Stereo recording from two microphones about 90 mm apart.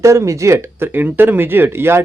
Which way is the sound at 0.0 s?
35° right (ahead or behind).